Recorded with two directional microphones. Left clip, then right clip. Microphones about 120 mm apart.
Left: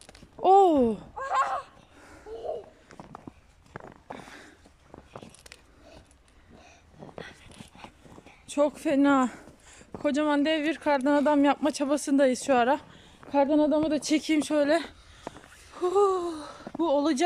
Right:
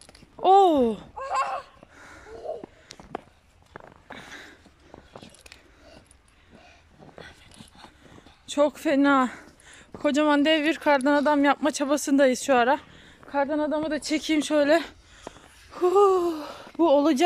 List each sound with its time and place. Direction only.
0.4 s speech: 10° left (ahead or behind)
1.1 s a sound: 5° right (ahead or behind)
7.2 s dog: centre (ahead or behind)
8.5 s speech: centre (ahead or behind)
13.3 s speech: 25° left (ahead or behind)
14.3 s a sound: 5° left (ahead or behind)
16.9 s speech: 5° right (ahead or behind)